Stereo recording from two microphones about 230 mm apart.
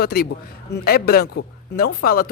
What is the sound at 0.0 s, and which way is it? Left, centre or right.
Speech, left.